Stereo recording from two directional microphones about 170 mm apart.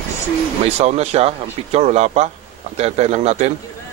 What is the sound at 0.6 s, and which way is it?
Speech, 40° right (ahead or behind).